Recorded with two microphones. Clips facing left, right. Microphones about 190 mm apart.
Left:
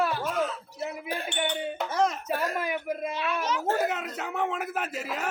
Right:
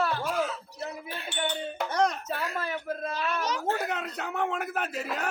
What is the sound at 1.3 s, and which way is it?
Speech, 15° left (ahead or behind).